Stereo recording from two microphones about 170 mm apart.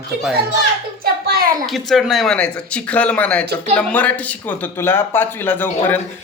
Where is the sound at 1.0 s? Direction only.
60° right (ahead or behind).